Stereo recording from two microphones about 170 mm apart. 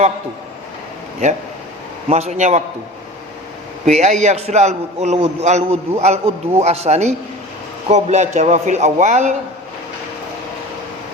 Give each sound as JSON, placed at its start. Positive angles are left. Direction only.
{"t": 2.0, "sound": "a man's voice", "side_deg": -40}
{"t": 3.8, "sound": "a man's voice", "side_deg": -40}